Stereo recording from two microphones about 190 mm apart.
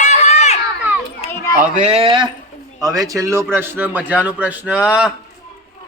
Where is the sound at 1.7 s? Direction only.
35° right (ahead or behind); by 4.9 s 5° right (ahead or behind).